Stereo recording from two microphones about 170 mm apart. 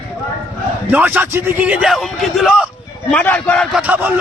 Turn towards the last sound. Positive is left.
turn(degrees=-10)  # may be behind; listen again after turning